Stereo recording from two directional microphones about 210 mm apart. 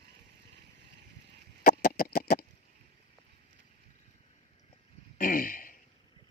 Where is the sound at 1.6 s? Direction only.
45° left (ahead or behind).